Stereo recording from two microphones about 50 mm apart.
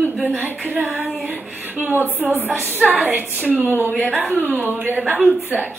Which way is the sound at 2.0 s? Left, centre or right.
Right.